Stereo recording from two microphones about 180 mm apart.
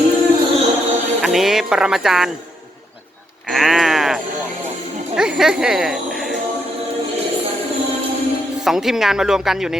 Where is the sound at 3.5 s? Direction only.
Centre (ahead or behind).